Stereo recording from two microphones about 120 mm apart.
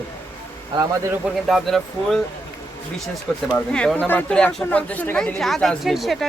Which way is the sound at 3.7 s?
10° left (ahead or behind).